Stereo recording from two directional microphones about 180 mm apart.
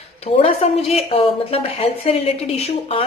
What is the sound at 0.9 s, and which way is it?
A woman's voice, 35° left (ahead or behind).